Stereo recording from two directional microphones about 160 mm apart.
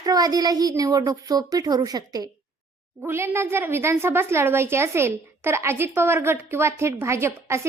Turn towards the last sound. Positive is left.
turn(degrees=-15)  # may be behind; listen again after turning